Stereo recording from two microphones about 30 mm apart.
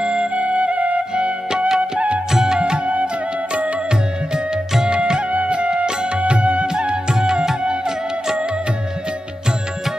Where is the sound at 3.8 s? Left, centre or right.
Right.